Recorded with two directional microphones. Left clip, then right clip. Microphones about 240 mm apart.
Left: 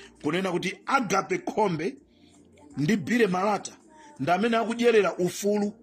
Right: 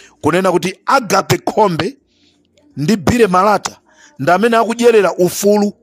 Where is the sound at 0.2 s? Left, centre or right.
Right.